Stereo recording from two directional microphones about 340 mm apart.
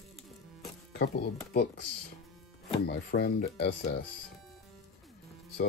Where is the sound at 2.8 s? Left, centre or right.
Left.